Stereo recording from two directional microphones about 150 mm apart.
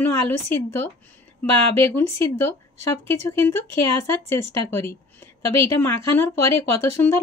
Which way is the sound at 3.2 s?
15° left (ahead or behind).